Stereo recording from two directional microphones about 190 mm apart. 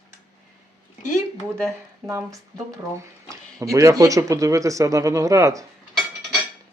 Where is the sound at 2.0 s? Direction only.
15° right (ahead or behind).